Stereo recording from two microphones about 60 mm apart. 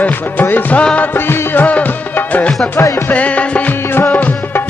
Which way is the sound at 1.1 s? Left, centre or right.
Left.